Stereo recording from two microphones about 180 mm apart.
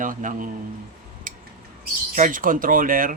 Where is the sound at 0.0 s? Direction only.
45° right (ahead or behind).